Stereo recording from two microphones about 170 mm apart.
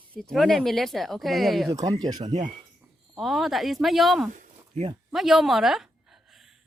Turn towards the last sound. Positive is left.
turn(degrees=0)  # may be behind; listen again after turning